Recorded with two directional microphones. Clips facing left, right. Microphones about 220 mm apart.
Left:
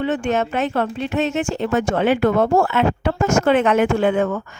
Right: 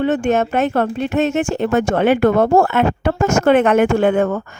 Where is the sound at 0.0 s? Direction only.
45° right (ahead or behind).